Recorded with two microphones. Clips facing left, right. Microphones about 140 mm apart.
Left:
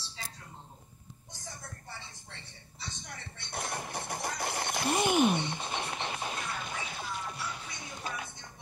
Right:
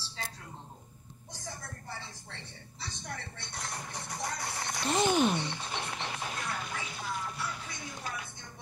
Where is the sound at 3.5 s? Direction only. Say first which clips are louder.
Left 5 dB; 25° left (ahead or behind).